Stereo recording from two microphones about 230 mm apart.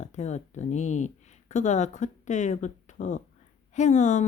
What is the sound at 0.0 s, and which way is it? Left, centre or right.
Speech, left.